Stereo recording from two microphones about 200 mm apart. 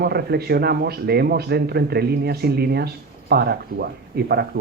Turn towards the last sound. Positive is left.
turn(degrees=-55)  # may be behind; listen again after turning